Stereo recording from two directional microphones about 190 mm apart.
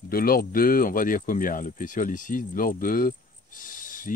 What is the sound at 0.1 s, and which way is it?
Speech, 50° left (ahead or behind).